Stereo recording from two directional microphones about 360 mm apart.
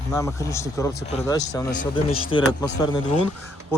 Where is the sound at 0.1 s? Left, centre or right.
Centre.